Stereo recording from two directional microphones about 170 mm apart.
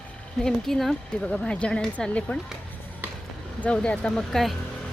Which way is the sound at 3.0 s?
10° right (ahead or behind).